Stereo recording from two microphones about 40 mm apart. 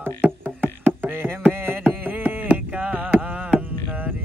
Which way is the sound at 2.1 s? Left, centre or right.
Right.